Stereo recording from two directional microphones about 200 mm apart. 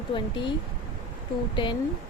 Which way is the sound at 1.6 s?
25° left (ahead or behind).